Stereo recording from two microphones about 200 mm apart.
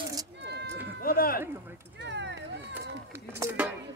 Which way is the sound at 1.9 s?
60° right (ahead or behind).